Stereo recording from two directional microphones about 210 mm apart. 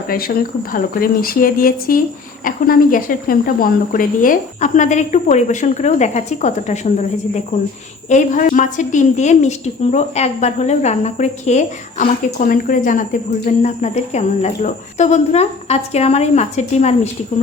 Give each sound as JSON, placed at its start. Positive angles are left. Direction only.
{"t": 0.1, "sound": "a woman's voice", "side_deg": 45}
{"t": 8.1, "sound": "a woman's voice", "side_deg": 40}